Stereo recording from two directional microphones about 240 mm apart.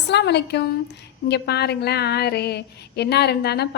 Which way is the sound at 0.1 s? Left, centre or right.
Left.